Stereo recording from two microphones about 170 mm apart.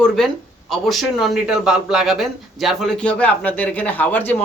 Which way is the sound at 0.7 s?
Centre (ahead or behind).